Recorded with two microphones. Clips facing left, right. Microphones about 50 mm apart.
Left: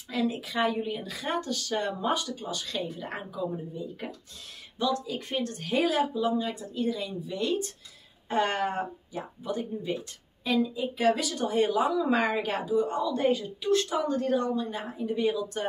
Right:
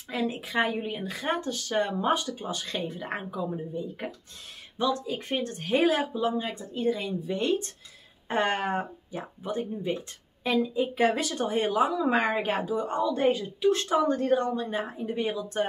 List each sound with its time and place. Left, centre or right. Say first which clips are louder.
0.1 s speech: even; centre